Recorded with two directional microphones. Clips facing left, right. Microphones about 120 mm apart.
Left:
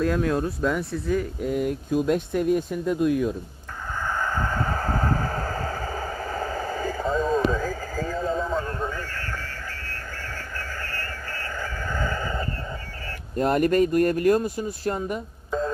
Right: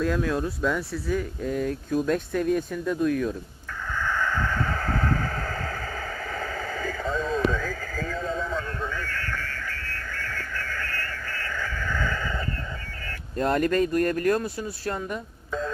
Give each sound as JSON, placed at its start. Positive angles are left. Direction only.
{"t": 0.0, "sound": "speech", "side_deg": 30}
{"t": 3.9, "sound": "vehicle", "side_deg": 40}
{"t": 13.3, "sound": "speech", "side_deg": 15}
{"t": 13.8, "sound": "speech", "side_deg": -40}
{"t": 14.3, "sound": "speech", "side_deg": 15}
{"t": 14.8, "sound": "speech", "side_deg": 40}